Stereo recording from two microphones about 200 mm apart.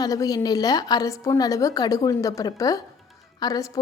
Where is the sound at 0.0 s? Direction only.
15° left (ahead or behind).